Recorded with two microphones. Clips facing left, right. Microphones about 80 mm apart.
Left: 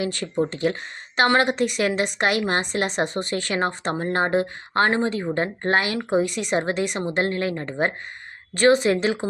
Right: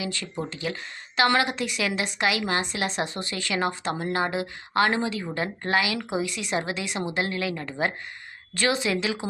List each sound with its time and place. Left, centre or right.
0.0 s a woman's voice: left